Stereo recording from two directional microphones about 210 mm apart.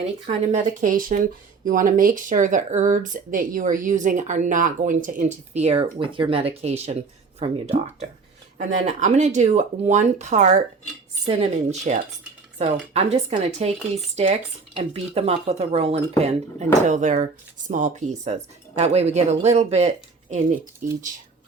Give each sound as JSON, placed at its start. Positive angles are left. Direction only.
{"t": 0.3, "sound": "speech", "side_deg": -35}
{"t": 14.8, "sound": "speech", "side_deg": -25}